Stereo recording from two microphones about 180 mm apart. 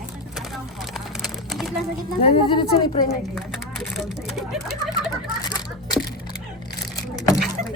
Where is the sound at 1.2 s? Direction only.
Centre (ahead or behind).